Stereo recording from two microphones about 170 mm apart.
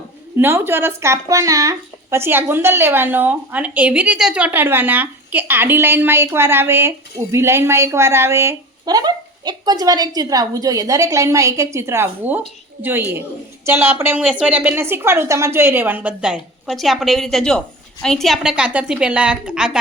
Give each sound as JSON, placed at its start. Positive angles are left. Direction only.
{"t": 0.3, "sound": "a woman's voice", "side_deg": -15}